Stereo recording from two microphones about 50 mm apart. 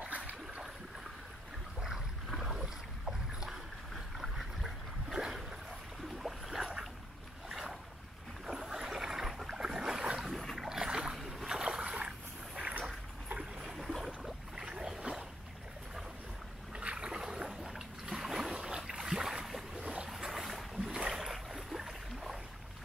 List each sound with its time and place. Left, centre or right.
0.0 s boat: right
1.8 s boat: centre
13.4 s boat: centre
16.7 s boat: centre
19.8 s boat: right
20.1 s boat: centre